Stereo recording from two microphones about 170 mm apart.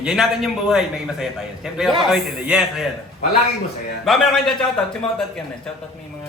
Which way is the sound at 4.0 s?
Centre (ahead or behind).